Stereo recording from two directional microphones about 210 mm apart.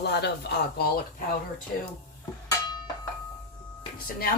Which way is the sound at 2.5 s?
15° left (ahead or behind).